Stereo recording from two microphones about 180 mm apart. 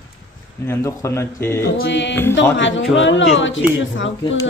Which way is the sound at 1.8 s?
80° left.